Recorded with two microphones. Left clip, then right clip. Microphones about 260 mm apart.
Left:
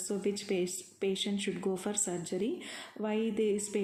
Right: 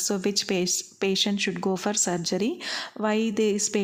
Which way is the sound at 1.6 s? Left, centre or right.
Right.